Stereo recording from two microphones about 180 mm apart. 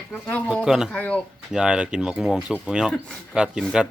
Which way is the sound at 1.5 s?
5° right (ahead or behind).